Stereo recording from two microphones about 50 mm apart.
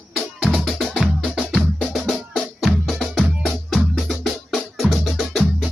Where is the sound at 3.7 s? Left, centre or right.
Centre.